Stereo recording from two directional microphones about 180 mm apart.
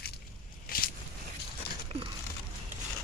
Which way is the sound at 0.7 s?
55° left (ahead or behind).